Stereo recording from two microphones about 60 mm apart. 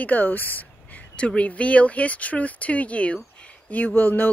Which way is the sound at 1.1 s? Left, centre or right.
Centre.